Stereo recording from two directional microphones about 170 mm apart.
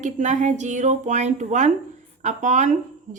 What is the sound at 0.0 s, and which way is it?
A woman's voice, 45° right (ahead or behind).